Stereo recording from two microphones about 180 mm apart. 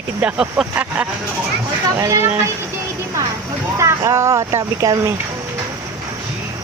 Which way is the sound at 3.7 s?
15° right (ahead or behind).